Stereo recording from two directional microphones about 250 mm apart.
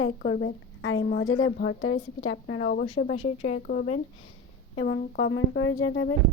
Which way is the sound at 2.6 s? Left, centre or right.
Left.